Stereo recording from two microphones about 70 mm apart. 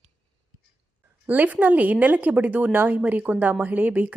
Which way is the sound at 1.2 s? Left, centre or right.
Right.